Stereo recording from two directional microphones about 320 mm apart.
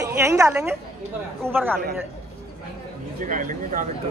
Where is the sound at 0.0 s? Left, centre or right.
Centre.